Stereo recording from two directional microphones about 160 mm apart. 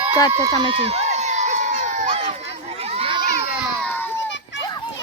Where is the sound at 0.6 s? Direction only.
35° right (ahead or behind).